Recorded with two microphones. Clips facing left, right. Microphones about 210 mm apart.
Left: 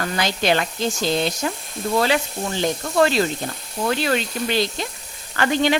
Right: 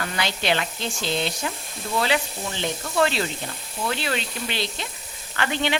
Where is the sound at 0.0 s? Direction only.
40° left (ahead or behind).